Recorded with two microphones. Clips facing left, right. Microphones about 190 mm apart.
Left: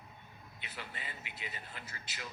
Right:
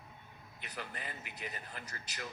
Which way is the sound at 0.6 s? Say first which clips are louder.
Right 3 dB; 45° right (ahead or behind).